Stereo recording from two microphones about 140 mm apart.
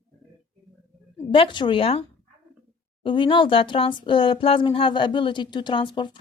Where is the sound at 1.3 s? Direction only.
35° left (ahead or behind).